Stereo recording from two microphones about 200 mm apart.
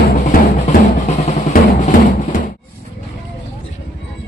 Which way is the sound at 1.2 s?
35° left (ahead or behind).